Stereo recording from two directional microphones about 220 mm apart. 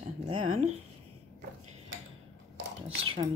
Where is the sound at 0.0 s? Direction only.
30° right (ahead or behind).